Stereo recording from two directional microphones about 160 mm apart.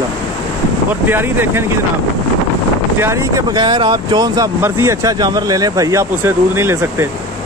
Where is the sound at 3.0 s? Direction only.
20° right (ahead or behind).